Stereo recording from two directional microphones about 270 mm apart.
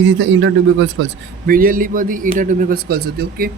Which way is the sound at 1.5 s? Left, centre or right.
Right.